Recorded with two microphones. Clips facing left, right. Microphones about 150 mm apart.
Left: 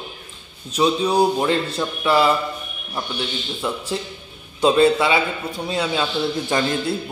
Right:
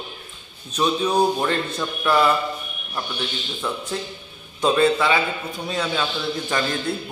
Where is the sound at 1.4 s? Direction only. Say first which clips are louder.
Left 3 dB; 30° left (ahead or behind).